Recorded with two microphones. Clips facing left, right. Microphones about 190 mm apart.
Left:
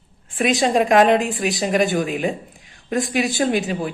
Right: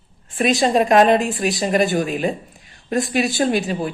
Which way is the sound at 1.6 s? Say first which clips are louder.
Right 1 dB; centre (ahead or behind).